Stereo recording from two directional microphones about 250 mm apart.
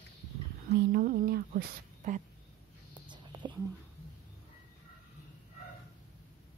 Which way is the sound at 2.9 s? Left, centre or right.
Centre.